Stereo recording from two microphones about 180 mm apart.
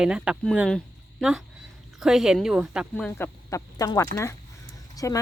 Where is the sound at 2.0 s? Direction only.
Centre (ahead or behind).